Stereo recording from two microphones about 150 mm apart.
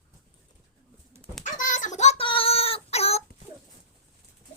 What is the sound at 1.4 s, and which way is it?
Child singing, 55° left (ahead or behind).